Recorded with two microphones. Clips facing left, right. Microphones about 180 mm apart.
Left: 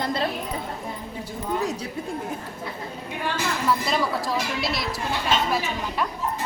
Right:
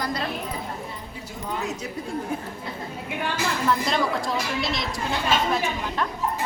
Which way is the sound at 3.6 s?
5° left (ahead or behind).